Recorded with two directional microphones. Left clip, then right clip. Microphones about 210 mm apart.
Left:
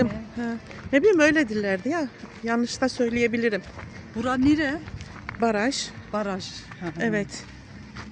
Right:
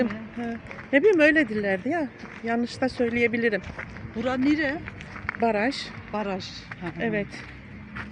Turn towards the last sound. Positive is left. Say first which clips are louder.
# left 1 dB
turn(degrees=20)  # may be behind; listen again after turning